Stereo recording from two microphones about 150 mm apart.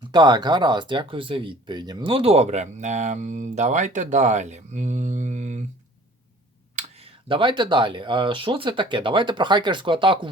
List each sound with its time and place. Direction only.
0.1 s speech: 30° right (ahead or behind); by 5.6 s 50° right (ahead or behind)
6.7 s speech: 45° right (ahead or behind)